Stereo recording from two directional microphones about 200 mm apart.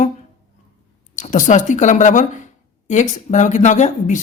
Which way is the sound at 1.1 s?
40° left (ahead or behind).